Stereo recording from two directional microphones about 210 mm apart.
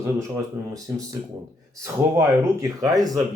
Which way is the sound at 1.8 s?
15° right (ahead or behind).